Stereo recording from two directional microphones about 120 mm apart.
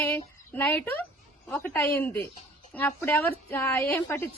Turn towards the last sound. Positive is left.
turn(degrees=20)  # may be behind; listen again after turning